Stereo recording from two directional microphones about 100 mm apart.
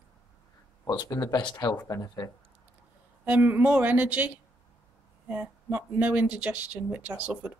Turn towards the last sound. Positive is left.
turn(degrees=-10)  # may be behind; listen again after turning